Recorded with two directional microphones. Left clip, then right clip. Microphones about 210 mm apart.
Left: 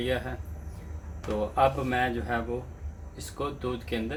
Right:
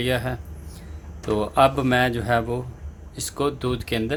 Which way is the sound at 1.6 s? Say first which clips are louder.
Right 7 dB; 45° right (ahead or behind).